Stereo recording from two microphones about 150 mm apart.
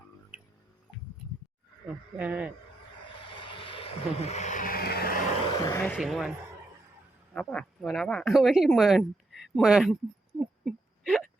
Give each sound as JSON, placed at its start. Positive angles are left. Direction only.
{"t": 2.1, "sound": "speech", "side_deg": -10}
{"t": 3.4, "sound": "vehicle", "side_deg": 35}
{"t": 5.6, "sound": "speech", "side_deg": 15}
{"t": 6.0, "sound": "speech", "side_deg": 0}
{"t": 7.3, "sound": "speech", "side_deg": 5}
{"t": 10.4, "sound": "whimper", "side_deg": 0}